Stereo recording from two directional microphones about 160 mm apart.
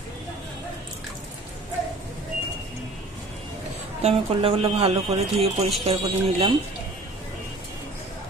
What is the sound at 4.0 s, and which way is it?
A man's voice, 40° right (ahead or behind).